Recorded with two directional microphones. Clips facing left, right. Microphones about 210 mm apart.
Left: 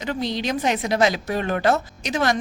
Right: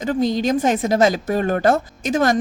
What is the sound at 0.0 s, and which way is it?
Speech, 45° right (ahead or behind).